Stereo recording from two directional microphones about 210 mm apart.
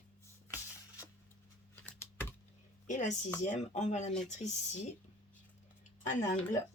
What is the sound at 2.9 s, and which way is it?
Speech, 35° left (ahead or behind).